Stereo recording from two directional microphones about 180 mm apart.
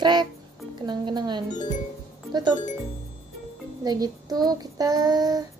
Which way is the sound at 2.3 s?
25° right (ahead or behind).